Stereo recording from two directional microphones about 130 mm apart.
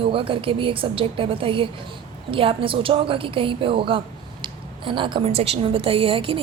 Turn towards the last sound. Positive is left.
turn(degrees=-45)  # may be behind; listen again after turning